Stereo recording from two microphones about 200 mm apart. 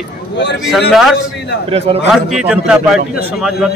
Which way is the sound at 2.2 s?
5° right (ahead or behind).